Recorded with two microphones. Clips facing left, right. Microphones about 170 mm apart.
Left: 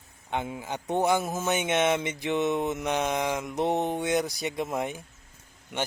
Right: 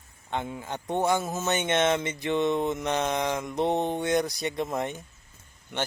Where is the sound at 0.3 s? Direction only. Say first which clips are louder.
Left 1 dB; 10° left (ahead or behind).